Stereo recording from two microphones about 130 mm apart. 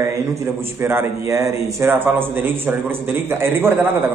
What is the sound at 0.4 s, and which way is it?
A man's voice, 20° right (ahead or behind).